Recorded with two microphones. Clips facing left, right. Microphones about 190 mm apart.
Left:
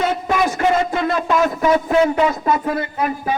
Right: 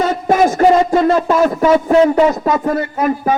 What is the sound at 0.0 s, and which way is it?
A man's voice, 45° right (ahead or behind).